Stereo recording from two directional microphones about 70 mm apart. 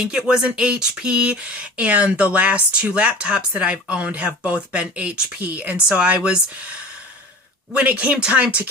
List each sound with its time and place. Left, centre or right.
0.0 s speech: centre
7.7 s speech: centre